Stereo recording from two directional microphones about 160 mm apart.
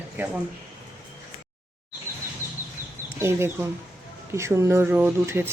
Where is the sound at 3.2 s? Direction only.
15° right (ahead or behind).